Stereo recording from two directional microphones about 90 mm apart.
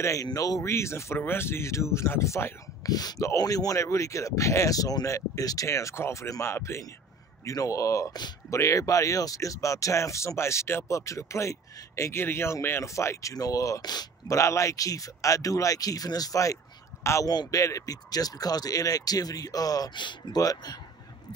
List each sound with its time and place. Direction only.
0.0 s speech: 40° left (ahead or behind)
14.3 s a man's voice: 35° left (ahead or behind)
17.3 s speech: 45° left (ahead or behind)
19.9 s speech: 60° left (ahead or behind)